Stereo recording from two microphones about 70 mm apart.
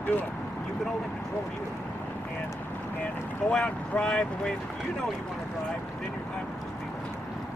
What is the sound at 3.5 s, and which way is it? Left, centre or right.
Speech, centre.